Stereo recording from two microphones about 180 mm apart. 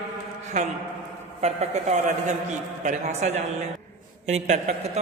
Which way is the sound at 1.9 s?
40° right (ahead or behind).